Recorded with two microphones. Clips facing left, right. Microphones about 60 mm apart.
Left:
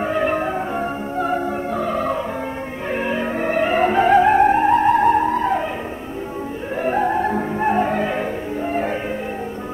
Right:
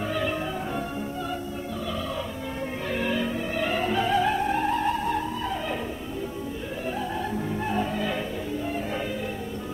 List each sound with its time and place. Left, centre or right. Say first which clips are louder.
0.0 s music: left 8 dB; left
2.9 s music: left 5 dB; left
3.3 s music: left 9 dB; left
6.8 s music: left 12 dB; left